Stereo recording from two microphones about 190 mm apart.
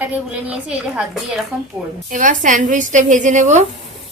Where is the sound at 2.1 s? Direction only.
45° right (ahead or behind).